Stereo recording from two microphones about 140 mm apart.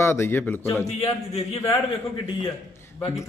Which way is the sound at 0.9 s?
45° left (ahead or behind).